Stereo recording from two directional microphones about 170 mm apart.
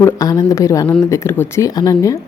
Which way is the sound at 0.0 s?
20° left (ahead or behind).